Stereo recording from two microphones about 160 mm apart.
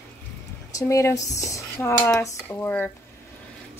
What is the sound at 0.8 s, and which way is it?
Speech, 20° left (ahead or behind).